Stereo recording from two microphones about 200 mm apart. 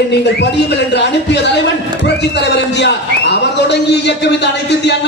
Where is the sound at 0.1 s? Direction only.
60° left (ahead or behind).